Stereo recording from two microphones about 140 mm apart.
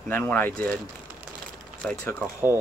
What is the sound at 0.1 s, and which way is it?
Speech, 15° left (ahead or behind).